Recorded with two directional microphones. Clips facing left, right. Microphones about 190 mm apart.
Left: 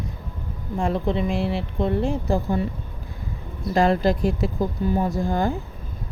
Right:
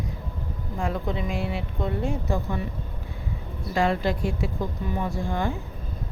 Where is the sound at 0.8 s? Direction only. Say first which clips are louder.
Left 5 dB; 30° left (ahead or behind).